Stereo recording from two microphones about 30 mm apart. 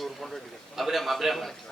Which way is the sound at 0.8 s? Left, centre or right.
Centre.